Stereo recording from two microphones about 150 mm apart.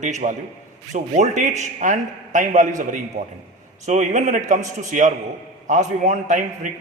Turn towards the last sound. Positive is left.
turn(degrees=-55)  # may be behind; listen again after turning